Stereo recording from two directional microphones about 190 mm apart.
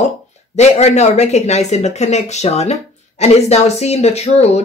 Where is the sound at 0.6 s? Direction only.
35° left (ahead or behind).